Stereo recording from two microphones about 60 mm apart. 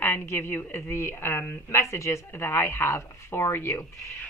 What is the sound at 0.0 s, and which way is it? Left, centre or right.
A woman's voice, left.